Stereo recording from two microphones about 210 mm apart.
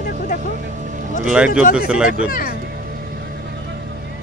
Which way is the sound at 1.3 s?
5° right (ahead or behind).